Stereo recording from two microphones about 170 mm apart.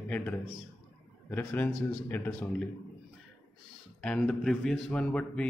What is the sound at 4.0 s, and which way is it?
Speech, 5° left (ahead or behind).